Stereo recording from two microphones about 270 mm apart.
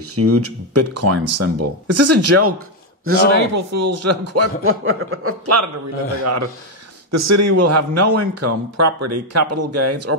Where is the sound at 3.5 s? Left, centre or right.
Right.